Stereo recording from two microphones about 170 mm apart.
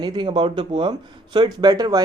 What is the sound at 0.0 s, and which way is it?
Speech, 25° right (ahead or behind).